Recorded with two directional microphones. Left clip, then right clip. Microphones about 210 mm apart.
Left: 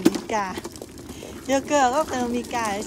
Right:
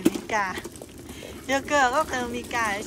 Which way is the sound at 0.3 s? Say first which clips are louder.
Even; 20° left (ahead or behind).